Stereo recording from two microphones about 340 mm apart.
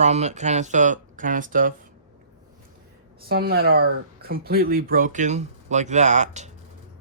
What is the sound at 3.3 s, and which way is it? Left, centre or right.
Speech, right.